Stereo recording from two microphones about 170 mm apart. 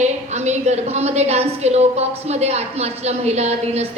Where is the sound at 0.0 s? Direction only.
40° right (ahead or behind).